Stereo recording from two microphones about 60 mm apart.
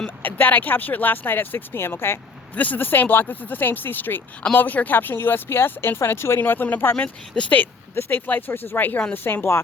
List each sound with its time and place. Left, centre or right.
0.2 s speech: left
2.6 s speech: left
6.4 s speech: left
7.9 s speech: left
8.3 s speech: left